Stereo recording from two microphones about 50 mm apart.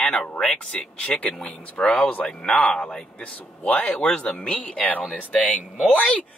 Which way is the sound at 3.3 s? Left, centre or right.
Left.